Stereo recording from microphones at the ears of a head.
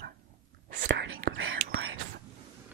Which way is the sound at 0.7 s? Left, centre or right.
Right.